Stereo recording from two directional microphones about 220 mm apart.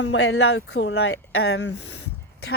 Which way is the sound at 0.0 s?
55° left (ahead or behind).